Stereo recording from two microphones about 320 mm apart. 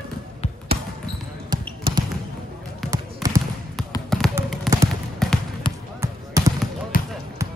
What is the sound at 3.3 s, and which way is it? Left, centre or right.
Trickle, centre.